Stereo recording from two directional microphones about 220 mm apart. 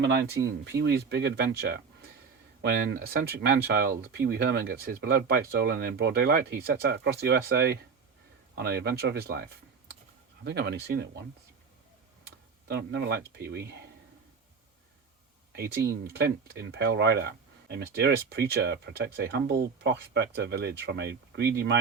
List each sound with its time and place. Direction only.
0.0 s speech: 55° right (ahead or behind)
12.6 s speech: 50° right (ahead or behind)
15.9 s speech: 50° right (ahead or behind)